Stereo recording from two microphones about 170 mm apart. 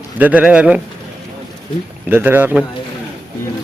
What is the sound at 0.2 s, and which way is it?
Speech, 10° right (ahead or behind).